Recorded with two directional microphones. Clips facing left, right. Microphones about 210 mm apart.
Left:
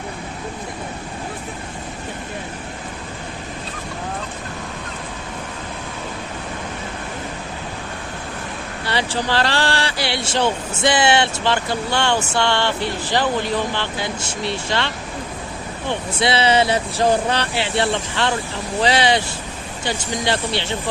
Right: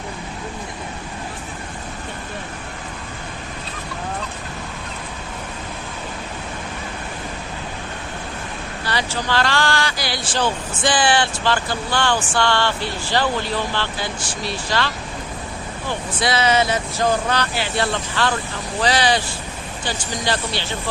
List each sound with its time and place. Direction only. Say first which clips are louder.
8.9 s speech: left 2 dB; 30° left (ahead or behind)